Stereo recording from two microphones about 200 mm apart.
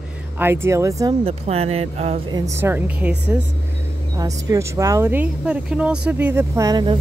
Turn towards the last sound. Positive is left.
turn(degrees=-20)  # may be behind; listen again after turning